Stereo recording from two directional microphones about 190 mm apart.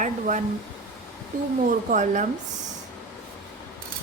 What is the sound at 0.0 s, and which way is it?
Air conditioning, 40° right (ahead or behind).